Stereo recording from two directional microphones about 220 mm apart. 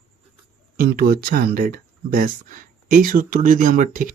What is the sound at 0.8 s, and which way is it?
Speech, 45° right (ahead or behind).